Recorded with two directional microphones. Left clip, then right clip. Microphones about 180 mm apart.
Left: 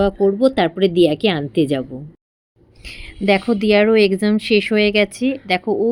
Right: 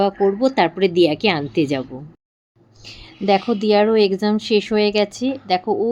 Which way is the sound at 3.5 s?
20° left (ahead or behind).